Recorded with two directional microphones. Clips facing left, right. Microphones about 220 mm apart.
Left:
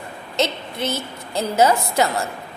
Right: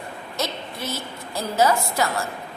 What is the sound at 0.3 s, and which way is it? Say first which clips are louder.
A woman's voice: left 7 dB; 20° left (ahead or behind).